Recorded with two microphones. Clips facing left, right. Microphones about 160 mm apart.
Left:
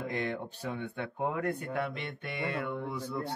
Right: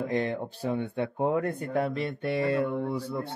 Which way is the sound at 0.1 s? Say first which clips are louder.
Right 6 dB; 35° right (ahead or behind).